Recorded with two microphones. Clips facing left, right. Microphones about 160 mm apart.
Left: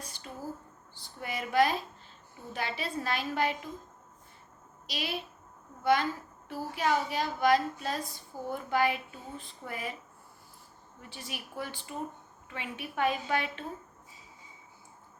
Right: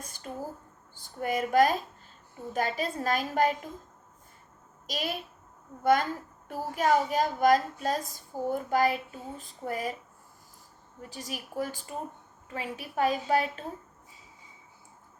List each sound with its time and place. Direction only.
0.0 s a sound: 50° right (ahead or behind)
0.9 s a woman's voice: 45° right (ahead or behind)
4.9 s a woman's voice: 45° right (ahead or behind)
11.1 s a woman's voice: 40° right (ahead or behind)